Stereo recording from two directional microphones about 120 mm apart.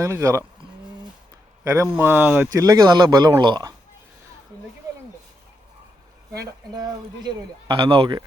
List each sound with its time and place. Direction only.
0.0 s speech: 25° right (ahead or behind)
1.6 s speech: 25° right (ahead or behind)
2.6 s speech: 30° right (ahead or behind)
6.3 s speech: 30° right (ahead or behind)